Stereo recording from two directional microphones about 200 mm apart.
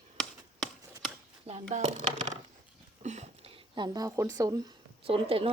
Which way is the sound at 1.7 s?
35° right (ahead or behind).